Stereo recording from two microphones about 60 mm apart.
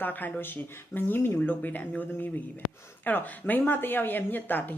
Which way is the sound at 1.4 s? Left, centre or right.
Left.